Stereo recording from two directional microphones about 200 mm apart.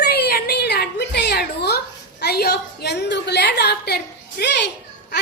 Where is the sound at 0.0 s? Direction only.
50° left (ahead or behind).